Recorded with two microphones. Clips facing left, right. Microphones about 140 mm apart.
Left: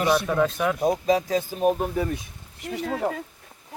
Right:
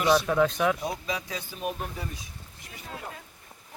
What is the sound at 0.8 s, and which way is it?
Speech, 45° left (ahead or behind).